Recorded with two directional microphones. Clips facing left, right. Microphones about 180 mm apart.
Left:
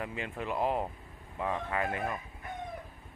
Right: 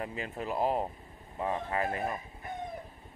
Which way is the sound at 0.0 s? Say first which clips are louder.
Even; 35° right (ahead or behind).